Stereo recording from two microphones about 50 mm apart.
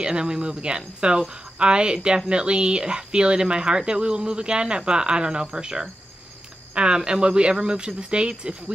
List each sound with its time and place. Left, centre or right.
0.0 s speech: centre